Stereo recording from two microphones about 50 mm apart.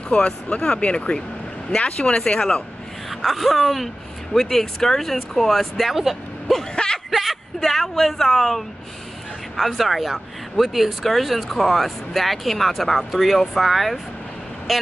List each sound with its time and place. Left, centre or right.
0.1 s speech: left
3.1 s speech: centre
6.7 s a sound: centre
7.1 s a woman's voice: centre